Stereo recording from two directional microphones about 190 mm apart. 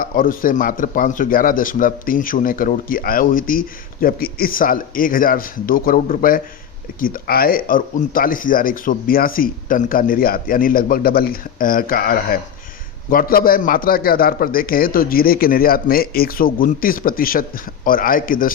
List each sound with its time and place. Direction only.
0.0 s a man's voice: 45° left (ahead or behind)